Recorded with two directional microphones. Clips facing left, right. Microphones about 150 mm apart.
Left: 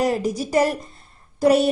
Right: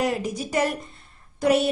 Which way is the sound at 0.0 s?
35° left (ahead or behind).